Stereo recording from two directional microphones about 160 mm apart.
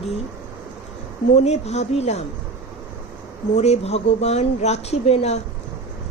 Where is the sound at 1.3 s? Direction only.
45° left (ahead or behind).